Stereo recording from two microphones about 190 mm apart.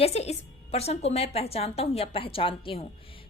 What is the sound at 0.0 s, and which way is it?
A woman's voice, 35° left (ahead or behind).